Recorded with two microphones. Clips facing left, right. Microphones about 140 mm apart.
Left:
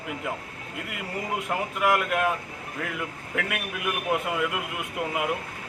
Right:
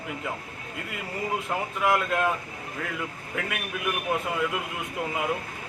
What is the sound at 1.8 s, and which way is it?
Speech, 15° left (ahead or behind).